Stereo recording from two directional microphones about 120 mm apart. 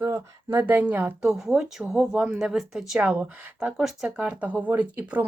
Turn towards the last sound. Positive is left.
turn(degrees=-15)  # may be behind; listen again after turning